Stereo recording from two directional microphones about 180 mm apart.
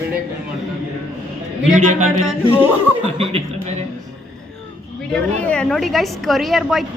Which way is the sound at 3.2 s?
30° right (ahead or behind).